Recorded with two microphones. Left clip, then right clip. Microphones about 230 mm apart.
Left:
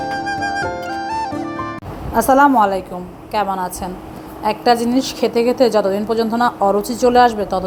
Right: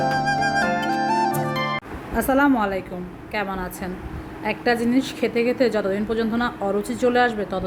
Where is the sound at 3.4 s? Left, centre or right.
Centre.